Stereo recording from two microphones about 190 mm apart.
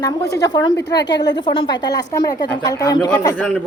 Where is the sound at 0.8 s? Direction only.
65° left (ahead or behind).